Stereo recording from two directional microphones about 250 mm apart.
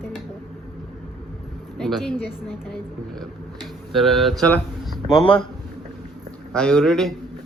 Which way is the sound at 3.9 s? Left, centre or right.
Centre.